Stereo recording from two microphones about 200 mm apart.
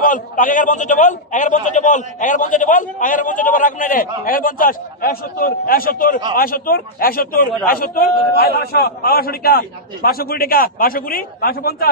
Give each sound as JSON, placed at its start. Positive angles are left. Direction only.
{"t": 0.0, "sound": "a man's voice", "side_deg": 40}